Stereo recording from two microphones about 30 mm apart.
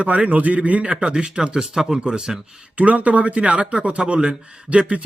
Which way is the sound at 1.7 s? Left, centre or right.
Centre.